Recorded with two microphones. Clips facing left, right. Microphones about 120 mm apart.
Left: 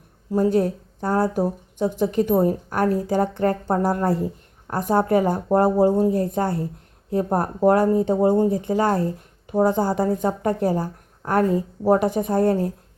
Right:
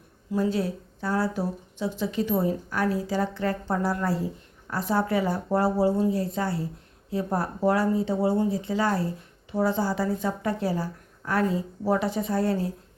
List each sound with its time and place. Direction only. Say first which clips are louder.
0.3 s speech: left 6 dB; 45° left (ahead or behind)